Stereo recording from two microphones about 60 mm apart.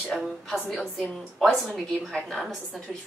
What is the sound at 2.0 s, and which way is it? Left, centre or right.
Speech, centre.